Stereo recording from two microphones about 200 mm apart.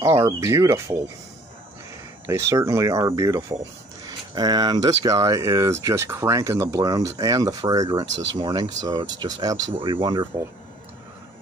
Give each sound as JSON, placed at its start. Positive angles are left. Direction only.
{"t": 0.0, "sound": "speech", "side_deg": -20}
{"t": 2.2, "sound": "speech", "side_deg": -15}